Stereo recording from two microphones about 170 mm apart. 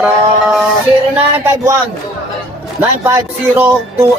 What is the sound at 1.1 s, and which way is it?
Music, 10° right (ahead or behind).